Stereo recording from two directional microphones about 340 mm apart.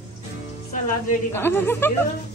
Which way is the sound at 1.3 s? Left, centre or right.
Centre.